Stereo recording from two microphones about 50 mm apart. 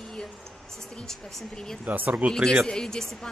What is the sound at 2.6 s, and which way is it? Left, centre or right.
Speech, centre.